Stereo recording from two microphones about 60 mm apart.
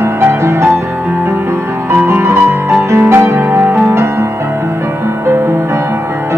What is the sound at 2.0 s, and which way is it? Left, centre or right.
Music, right.